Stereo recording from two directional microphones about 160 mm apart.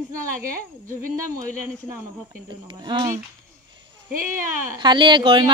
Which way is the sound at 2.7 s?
30° right (ahead or behind).